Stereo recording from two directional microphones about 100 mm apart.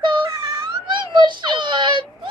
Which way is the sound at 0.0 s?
50° right (ahead or behind).